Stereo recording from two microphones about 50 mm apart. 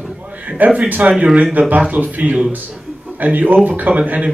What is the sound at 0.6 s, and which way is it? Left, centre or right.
Speech, right.